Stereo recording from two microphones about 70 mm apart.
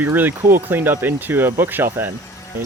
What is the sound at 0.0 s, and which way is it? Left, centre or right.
Speech, right.